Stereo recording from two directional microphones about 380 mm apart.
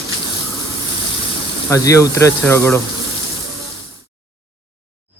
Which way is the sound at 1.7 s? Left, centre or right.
Centre.